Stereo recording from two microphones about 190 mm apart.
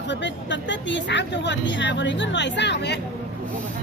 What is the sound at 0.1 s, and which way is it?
Speech, 70° left (ahead or behind).